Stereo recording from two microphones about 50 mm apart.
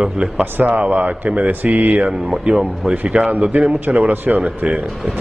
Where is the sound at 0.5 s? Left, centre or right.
Right.